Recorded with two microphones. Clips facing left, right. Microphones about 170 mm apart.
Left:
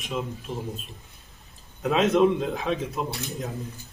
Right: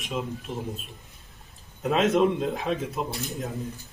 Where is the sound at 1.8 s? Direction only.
Centre (ahead or behind).